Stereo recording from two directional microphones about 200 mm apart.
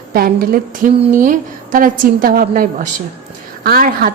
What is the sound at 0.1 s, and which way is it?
A woman's voice, 45° right (ahead or behind).